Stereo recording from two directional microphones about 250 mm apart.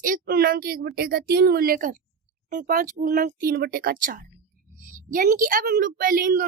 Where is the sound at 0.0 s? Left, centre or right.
Right.